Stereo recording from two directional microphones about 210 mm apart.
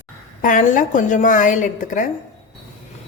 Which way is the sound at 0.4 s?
35° left (ahead or behind).